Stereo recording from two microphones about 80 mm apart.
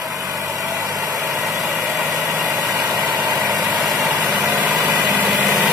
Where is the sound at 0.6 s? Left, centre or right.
Right.